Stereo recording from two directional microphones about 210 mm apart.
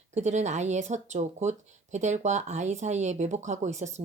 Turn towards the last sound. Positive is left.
turn(degrees=-35)  # may be behind; listen again after turning